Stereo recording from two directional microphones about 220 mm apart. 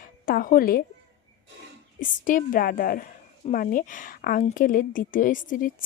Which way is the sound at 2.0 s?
35° left (ahead or behind).